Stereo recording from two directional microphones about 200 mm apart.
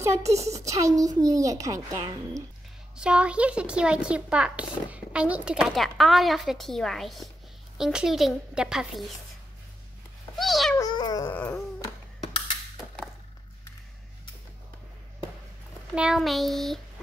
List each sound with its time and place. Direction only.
0.3 s a child's voice: 15° right (ahead or behind)
3.0 s a child's voice: 5° right (ahead or behind)
10.3 s cat: centre (ahead or behind)
10.8 s dog: 20° left (ahead or behind)
11.3 s a sound: 10° left (ahead or behind)
15.9 s a child's voice: 5° right (ahead or behind)